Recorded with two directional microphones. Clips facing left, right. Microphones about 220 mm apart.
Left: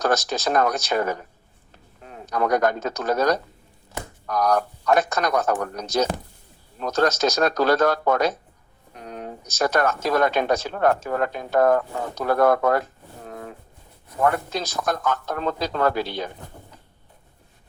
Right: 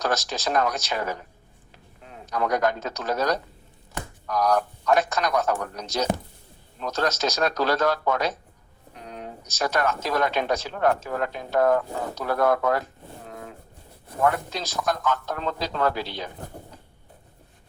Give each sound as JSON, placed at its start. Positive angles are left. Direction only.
{"t": 0.0, "sound": "speech", "side_deg": 50}
{"t": 14.3, "sound": "speech", "side_deg": 50}